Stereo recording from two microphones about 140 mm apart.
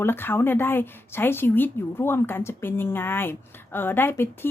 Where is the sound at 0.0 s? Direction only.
15° left (ahead or behind).